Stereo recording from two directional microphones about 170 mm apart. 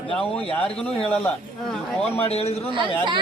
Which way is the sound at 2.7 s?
30° right (ahead or behind).